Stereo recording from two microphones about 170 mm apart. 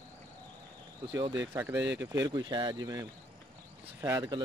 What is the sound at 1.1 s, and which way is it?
Speech, 25° right (ahead or behind).